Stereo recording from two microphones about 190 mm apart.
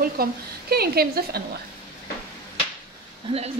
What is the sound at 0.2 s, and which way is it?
A woman's voice, 55° right (ahead or behind).